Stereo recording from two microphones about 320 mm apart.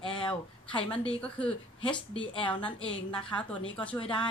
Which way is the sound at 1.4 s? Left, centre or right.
Centre.